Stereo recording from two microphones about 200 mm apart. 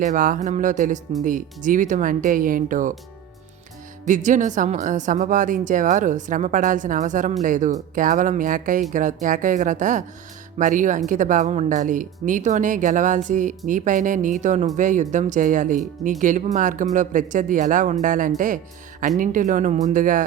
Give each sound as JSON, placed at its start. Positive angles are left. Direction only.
{"t": 0.0, "sound": "a woman's voice", "side_deg": -40}
{"t": 4.0, "sound": "a woman's voice", "side_deg": -40}